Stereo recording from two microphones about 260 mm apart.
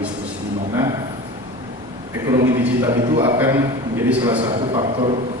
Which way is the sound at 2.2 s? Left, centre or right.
Centre.